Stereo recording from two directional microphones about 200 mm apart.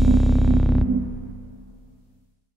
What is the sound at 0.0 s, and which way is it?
Music, centre (ahead or behind).